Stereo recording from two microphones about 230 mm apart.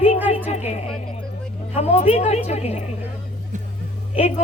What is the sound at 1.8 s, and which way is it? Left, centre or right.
Speech, left.